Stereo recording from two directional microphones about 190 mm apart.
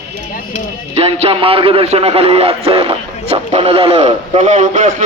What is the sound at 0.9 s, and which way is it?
A man's voice, 30° right (ahead or behind).